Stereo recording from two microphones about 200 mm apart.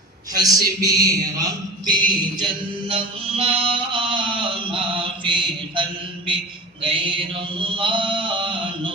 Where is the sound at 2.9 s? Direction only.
30° right (ahead or behind).